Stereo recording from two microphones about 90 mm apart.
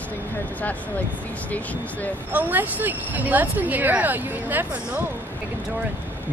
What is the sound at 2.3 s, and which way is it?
Speech, 20° right (ahead or behind).